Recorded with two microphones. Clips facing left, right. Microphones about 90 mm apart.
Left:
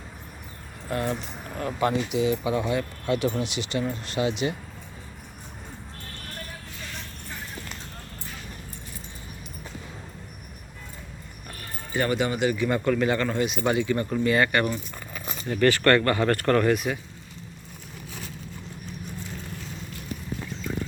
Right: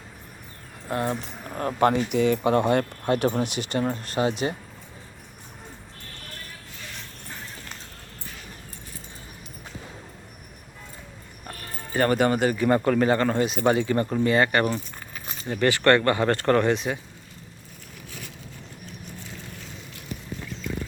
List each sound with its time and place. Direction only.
0.9 s speech: 30° right (ahead or behind)
1.5 s speech: 50° right (ahead or behind)
11.4 s speech: 40° right (ahead or behind)
15.4 s speech: 20° right (ahead or behind)